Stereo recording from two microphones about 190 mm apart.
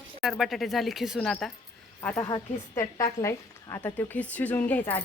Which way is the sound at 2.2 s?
20° left (ahead or behind).